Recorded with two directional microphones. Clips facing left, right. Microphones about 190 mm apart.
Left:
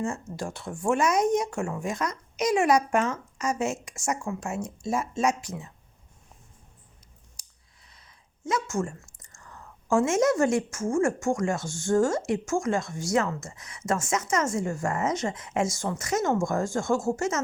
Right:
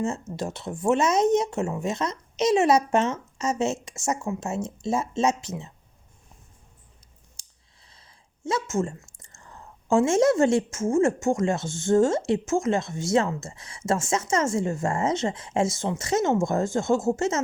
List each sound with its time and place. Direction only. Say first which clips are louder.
0.3 s speech: right 3 dB; 20° right (ahead or behind)
7.4 s scissors: right 1 dB; 25° right (ahead or behind)
7.9 s a sound: right 1 dB; 30° right (ahead or behind)
9.1 s speech: right 1 dB; 25° right (ahead or behind)